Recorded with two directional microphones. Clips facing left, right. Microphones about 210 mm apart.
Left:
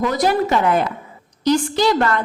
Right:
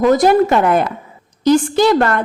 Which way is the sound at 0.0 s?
50° right (ahead or behind).